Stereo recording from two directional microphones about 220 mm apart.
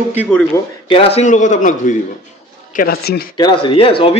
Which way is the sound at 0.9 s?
25° left (ahead or behind).